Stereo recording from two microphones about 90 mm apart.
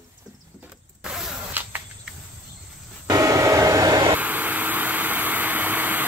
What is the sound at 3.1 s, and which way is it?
Hair dryer, 40° right (ahead or behind).